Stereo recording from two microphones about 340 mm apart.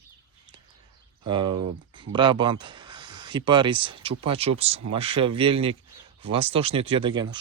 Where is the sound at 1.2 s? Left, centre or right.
Centre.